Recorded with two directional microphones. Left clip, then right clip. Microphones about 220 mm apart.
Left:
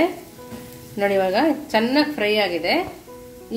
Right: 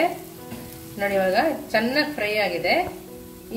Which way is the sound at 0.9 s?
45° left (ahead or behind).